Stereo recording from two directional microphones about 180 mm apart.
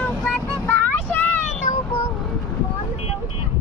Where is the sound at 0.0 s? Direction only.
5° left (ahead or behind).